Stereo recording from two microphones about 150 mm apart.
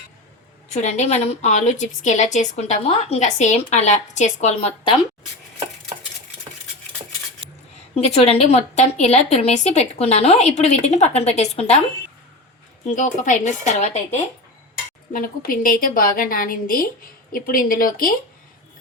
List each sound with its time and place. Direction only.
0.7 s a woman's voice: 50° left (ahead or behind)
7.9 s a woman's voice: 45° left (ahead or behind)
12.9 s a woman's voice: 55° left (ahead or behind)
15.1 s a woman's voice: 70° left (ahead or behind)